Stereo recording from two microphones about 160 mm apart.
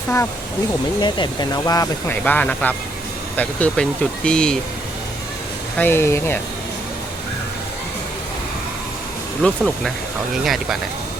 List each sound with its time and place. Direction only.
1.0 s speech: 25° left (ahead or behind); by 4.5 s 5° left (ahead or behind)
5.7 s speech: 15° left (ahead or behind)
9.4 s speech: centre (ahead or behind)